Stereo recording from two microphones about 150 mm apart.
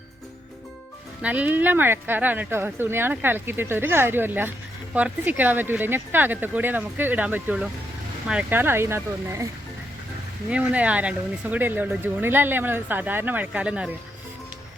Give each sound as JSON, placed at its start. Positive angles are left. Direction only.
{"t": 1.2, "sound": "speech", "side_deg": -10}
{"t": 10.5, "sound": "speech", "side_deg": -10}